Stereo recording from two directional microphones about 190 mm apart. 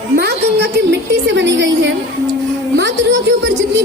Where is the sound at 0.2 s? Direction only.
60° right (ahead or behind).